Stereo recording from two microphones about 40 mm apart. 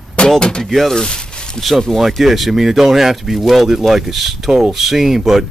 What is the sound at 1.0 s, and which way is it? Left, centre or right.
Zipper, left.